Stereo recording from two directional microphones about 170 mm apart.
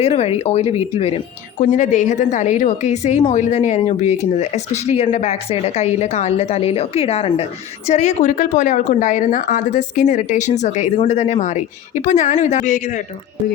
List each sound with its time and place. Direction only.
0.0 s a woman's voice: 35° left (ahead or behind)
1.6 s a woman's voice: 45° left (ahead or behind)